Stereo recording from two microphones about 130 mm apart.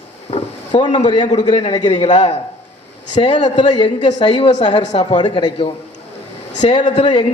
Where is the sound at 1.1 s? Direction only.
35° left (ahead or behind).